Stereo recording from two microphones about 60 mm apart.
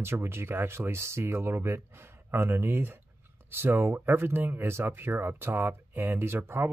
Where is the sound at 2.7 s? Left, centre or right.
Right.